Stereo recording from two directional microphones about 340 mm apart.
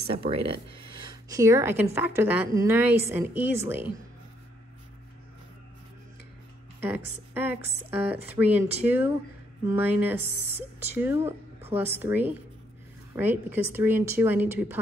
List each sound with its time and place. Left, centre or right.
0.1 s a woman's voice: centre
7.3 s a woman's voice: centre